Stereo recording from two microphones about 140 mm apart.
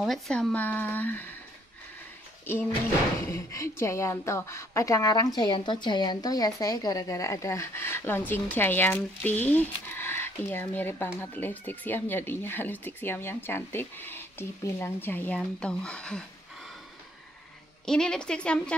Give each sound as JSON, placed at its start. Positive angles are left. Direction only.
{"t": 0.0, "sound": "speech", "side_deg": 5}
{"t": 3.3, "sound": "a woman's voice", "side_deg": 20}
{"t": 17.8, "sound": "a woman's voice", "side_deg": 5}